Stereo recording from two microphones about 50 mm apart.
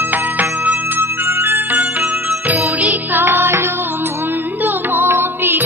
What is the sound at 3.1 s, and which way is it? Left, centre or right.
Music, right.